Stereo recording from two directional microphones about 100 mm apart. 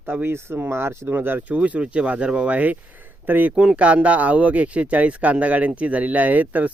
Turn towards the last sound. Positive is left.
turn(degrees=-15)  # may be behind; listen again after turning